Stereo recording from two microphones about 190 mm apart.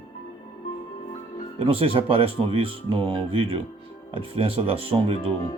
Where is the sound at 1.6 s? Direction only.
30° right (ahead or behind).